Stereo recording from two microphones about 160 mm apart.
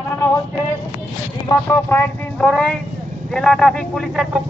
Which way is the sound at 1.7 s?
15° left (ahead or behind).